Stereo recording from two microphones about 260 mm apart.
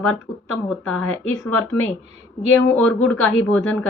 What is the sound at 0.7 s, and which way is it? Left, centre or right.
Speech, centre.